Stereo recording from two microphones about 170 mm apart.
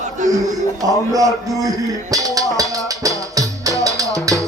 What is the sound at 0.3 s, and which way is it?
Speech, 20° right (ahead or behind).